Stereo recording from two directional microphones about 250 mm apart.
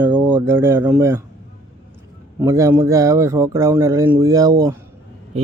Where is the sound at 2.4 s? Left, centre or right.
Centre.